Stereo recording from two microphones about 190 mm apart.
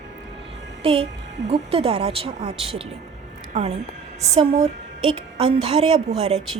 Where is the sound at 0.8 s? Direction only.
30° right (ahead or behind).